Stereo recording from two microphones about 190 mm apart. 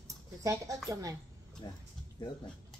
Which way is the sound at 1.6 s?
25° left (ahead or behind).